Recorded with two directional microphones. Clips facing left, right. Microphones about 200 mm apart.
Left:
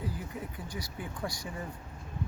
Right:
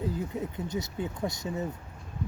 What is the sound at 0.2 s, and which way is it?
Speech, 25° right (ahead or behind).